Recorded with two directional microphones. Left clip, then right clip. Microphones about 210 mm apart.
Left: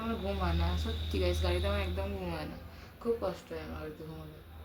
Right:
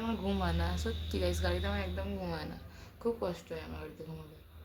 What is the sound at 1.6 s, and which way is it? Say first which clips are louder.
Speech: left 3 dB; 5° left (ahead or behind).